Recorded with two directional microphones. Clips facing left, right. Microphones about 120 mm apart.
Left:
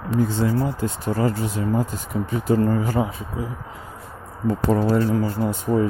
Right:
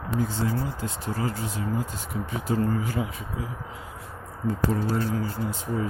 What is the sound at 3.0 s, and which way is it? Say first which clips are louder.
Speech: left 6 dB; 30° left (ahead or behind).